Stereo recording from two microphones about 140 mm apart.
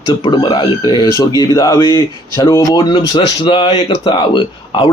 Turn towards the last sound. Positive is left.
turn(degrees=35)  # may be behind; listen again after turning